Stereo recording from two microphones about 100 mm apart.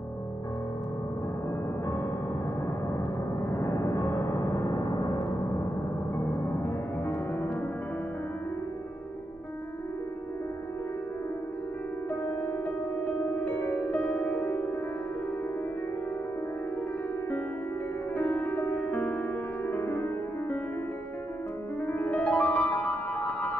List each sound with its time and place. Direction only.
3.5 s gong: 30° left (ahead or behind)
6.1 s music: 25° left (ahead or behind)
13.0 s music: 15° left (ahead or behind)
18.1 s music: 20° left (ahead or behind)
21.8 s music: 20° left (ahead or behind)